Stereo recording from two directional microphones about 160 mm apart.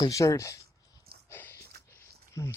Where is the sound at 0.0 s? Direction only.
20° left (ahead or behind).